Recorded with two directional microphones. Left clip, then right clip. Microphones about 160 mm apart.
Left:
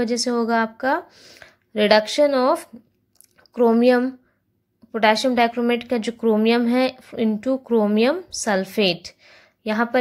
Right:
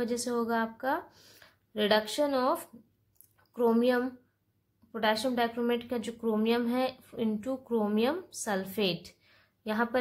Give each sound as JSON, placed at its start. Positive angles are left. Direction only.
{"t": 0.0, "sound": "a woman's voice", "side_deg": 20}